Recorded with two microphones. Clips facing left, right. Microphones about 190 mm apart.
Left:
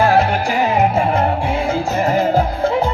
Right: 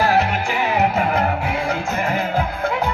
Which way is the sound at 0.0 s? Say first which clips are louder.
Left 4 dB; 30° left (ahead or behind).